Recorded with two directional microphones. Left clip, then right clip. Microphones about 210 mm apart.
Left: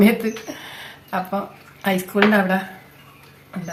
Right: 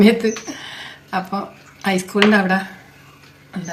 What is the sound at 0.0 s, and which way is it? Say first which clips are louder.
A woman's voice: right 3 dB; 10° left (ahead or behind).